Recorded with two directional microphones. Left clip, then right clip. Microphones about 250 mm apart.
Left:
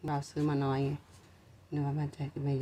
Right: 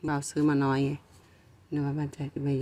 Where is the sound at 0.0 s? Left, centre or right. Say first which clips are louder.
Right 6 dB; right.